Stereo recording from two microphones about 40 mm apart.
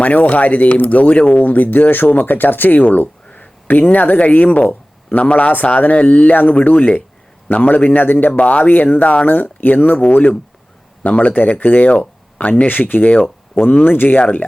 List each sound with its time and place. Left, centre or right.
0.0 s speech: left
3.3 s a sound: left
4.3 s a man's voice: left
7.9 s speech: left
8.4 s speech: left
9.2 s speech: left
12.4 s speech: left
12.9 s speech: left
13.8 s speech: left